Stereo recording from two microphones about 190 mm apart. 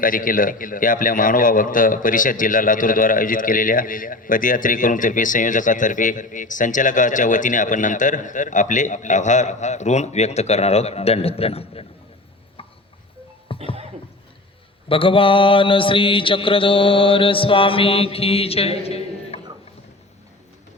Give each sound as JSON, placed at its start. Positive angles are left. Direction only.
{"t": 0.0, "sound": "a man's voice", "side_deg": 45}
{"t": 13.5, "sound": "a sound", "side_deg": 30}
{"t": 14.8, "sound": "mantra", "side_deg": 30}